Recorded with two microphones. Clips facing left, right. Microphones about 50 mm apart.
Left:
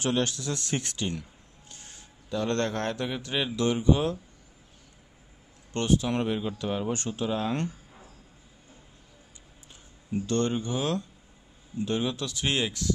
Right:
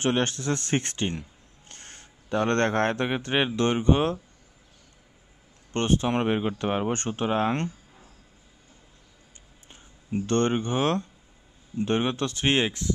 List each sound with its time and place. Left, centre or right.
0.0 s speech: right
5.7 s speech: right
9.7 s speech: right